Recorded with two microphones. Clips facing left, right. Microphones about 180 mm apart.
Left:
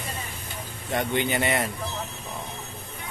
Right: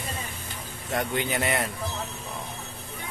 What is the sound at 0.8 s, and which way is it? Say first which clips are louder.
Speech: left 2 dB; centre (ahead or behind).